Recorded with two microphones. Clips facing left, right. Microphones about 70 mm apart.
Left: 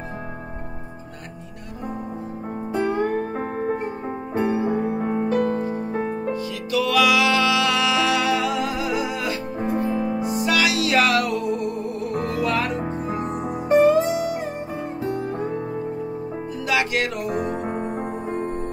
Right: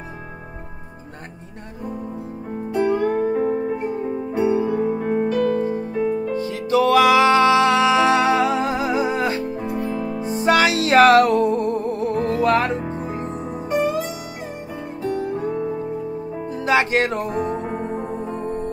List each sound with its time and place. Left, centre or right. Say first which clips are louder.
2.9 s music: right 4 dB; left
6.7 s music: right 5 dB; right
9.6 s music: left 2 dB; left
9.9 s music: left 2 dB; left
10.2 s music: right 7 dB; right
13.7 s music: left 6 dB; left
16.6 s music: right 5 dB; right